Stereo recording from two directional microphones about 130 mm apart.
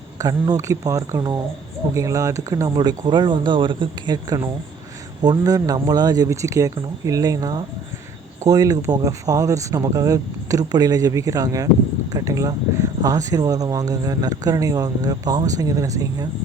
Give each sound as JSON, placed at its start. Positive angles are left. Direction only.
{"t": 0.2, "sound": "speech", "side_deg": -25}